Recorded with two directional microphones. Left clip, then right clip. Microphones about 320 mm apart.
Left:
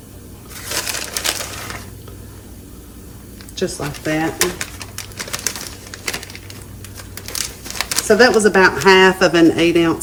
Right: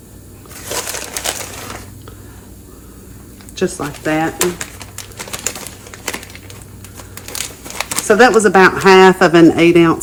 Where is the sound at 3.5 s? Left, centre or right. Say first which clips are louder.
Right 3 dB; right.